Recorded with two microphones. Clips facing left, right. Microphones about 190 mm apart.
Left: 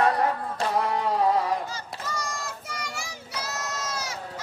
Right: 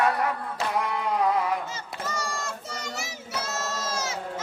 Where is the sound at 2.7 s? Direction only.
25° right (ahead or behind).